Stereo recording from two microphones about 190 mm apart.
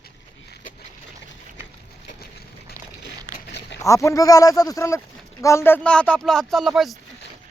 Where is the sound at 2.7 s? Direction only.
20° right (ahead or behind).